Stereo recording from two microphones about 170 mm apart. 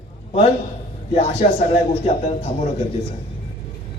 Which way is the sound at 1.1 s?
35° left (ahead or behind).